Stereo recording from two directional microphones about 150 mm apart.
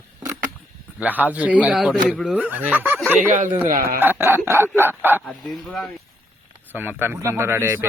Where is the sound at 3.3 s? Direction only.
60° right (ahead or behind).